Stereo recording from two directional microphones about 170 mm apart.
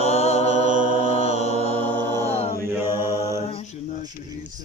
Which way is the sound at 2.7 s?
15° right (ahead or behind).